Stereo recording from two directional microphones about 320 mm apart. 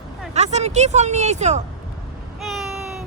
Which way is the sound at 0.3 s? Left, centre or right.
Right.